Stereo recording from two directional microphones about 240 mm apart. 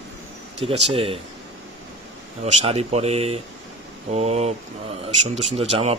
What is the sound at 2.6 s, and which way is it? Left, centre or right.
Speech, right.